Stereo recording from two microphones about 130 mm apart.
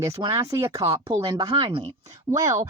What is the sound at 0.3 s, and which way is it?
Speech, 20° right (ahead or behind).